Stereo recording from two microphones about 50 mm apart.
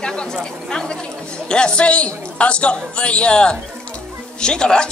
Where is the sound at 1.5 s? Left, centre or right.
Centre.